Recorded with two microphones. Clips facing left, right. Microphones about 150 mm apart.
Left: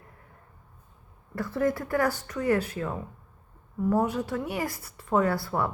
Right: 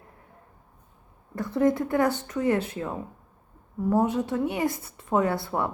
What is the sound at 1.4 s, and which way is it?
Speech, 20° right (ahead or behind).